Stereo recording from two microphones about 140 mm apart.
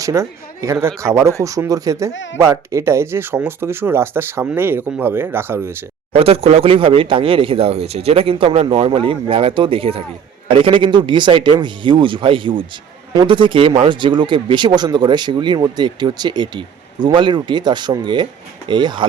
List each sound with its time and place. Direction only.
0.0 s speech: 20° right (ahead or behind)
6.1 s speech: 45° right (ahead or behind)